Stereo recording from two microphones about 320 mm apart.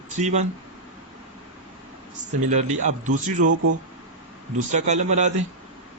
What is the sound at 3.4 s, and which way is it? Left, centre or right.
Speech, right.